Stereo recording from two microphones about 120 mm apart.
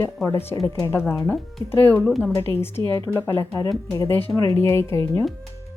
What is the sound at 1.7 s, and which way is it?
Speech, 20° left (ahead or behind).